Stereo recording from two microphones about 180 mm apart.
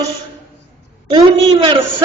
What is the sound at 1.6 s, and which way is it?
Speech, 25° right (ahead or behind).